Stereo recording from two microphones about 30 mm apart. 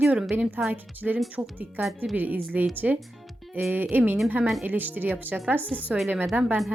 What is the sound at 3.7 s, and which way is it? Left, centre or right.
A woman's voice, right.